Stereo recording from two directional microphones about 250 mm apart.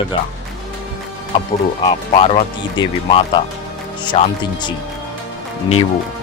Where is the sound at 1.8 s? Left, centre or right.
Left.